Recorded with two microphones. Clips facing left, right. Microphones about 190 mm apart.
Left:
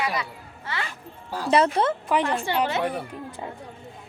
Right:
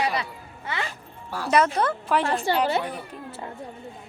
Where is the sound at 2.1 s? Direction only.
15° left (ahead or behind).